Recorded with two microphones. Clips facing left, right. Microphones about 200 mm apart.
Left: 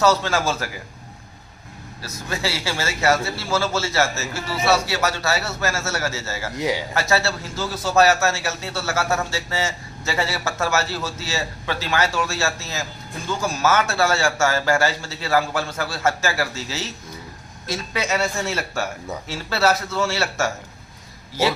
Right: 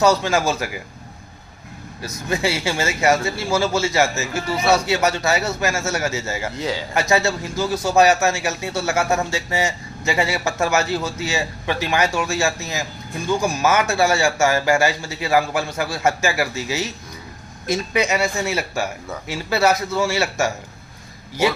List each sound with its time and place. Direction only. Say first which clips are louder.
0.0 s a man's voice: right 2 dB; 15° right (ahead or behind)
2.0 s a man's voice: right 5 dB; 20° right (ahead or behind)
6.6 s a man's voice: left 4 dB; 15° left (ahead or behind)
6.9 s a man's voice: right 3 dB; 15° right (ahead or behind)